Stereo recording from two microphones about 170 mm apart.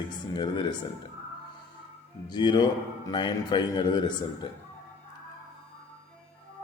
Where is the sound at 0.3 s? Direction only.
25° left (ahead or behind).